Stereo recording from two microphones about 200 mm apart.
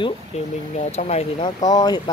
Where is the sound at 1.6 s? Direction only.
20° left (ahead or behind).